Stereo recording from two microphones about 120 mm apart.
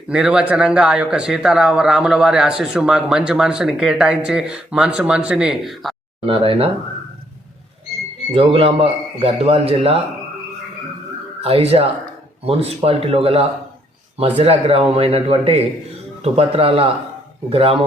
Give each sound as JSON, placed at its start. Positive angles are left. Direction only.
{"t": 0.1, "sound": "speech", "side_deg": -5}
{"t": 6.2, "sound": "a man's voice", "side_deg": -50}
{"t": 8.3, "sound": "a man's voice", "side_deg": -55}
{"t": 11.3, "sound": "a man's voice", "side_deg": -55}